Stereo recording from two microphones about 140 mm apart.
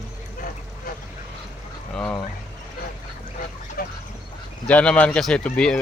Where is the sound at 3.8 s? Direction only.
90° left.